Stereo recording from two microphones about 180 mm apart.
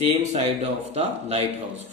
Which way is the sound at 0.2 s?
35° right (ahead or behind).